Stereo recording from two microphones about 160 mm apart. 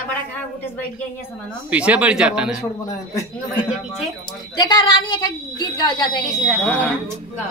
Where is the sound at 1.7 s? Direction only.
10° right (ahead or behind).